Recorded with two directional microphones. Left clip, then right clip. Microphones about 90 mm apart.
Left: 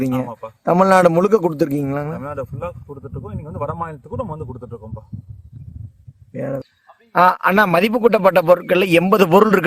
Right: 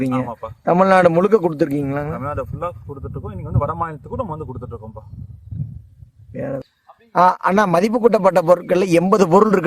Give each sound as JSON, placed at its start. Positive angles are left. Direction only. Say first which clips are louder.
{"t": 0.6, "sound": "a man's voice", "louder": "even", "side_deg": 35}
{"t": 2.1, "sound": "speech", "louder": "right 2 dB", "side_deg": -15}
{"t": 6.3, "sound": "a man's voice", "louder": "left 1 dB", "side_deg": 35}
{"t": 7.1, "sound": "a man's voice", "louder": "left 1 dB", "side_deg": 0}